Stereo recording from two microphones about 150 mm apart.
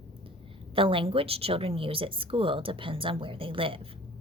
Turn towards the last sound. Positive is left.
turn(degrees=-35)  # may be behind; listen again after turning